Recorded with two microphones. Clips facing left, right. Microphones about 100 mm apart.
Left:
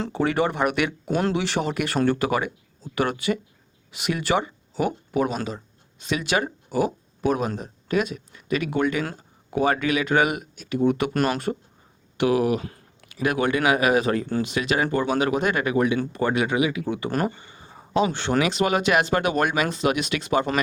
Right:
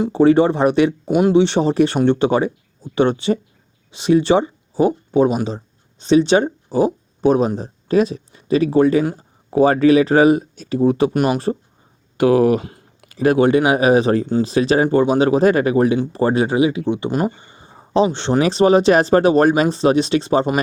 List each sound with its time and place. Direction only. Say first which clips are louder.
0.1 s speech: right 11 dB; 25° right (ahead or behind)
11.1 s speech: right 5 dB; 15° right (ahead or behind)
12.1 s speech: right 7 dB; 40° right (ahead or behind)
17.2 s speech: right 5 dB; 5° right (ahead or behind)
17.5 s a sound: right 2 dB; 20° right (ahead or behind)
17.9 s speech: right 6 dB; 25° right (ahead or behind)